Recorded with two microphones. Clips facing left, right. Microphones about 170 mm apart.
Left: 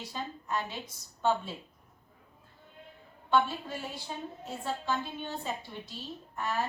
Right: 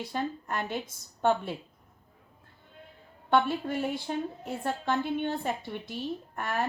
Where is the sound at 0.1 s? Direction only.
55° right (ahead or behind).